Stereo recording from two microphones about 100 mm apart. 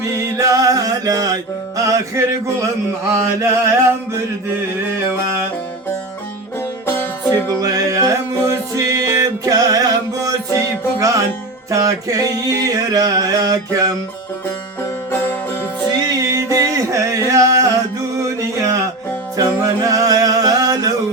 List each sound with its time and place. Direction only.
0.0 s music: 30° right (ahead or behind)
3.1 s mantra: 25° right (ahead or behind)
6.8 s music: 20° left (ahead or behind)
7.6 s music: 35° right (ahead or behind)
11.7 s a sound: 35° right (ahead or behind)
16.0 s a sound: 35° right (ahead or behind)
18.3 s music: 30° right (ahead or behind)